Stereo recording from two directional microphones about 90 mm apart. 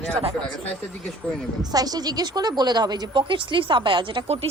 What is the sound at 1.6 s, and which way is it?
A woman's voice, 45° right (ahead or behind).